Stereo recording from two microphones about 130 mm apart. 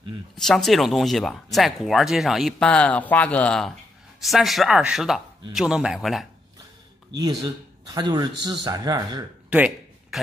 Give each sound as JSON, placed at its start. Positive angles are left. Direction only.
{"t": 0.4, "sound": "speech", "side_deg": 5}
{"t": 7.2, "sound": "a man's voice", "side_deg": -30}
{"t": 10.1, "sound": "speech", "side_deg": 0}